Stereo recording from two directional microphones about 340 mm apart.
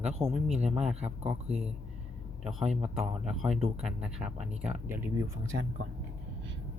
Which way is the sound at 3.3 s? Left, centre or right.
Centre.